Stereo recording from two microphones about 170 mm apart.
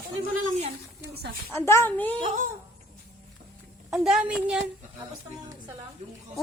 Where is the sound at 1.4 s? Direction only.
10° left (ahead or behind).